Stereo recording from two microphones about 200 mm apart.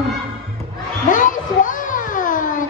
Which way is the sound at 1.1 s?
40° left (ahead or behind).